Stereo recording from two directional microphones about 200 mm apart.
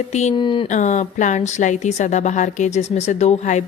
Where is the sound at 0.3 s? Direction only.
25° left (ahead or behind).